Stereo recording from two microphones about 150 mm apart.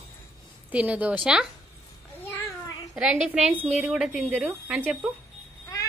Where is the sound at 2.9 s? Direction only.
5° right (ahead or behind).